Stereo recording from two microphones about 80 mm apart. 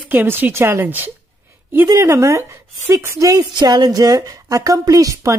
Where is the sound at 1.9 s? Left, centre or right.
Right.